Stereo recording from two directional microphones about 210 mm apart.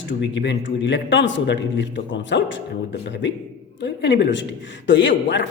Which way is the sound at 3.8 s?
55° left (ahead or behind).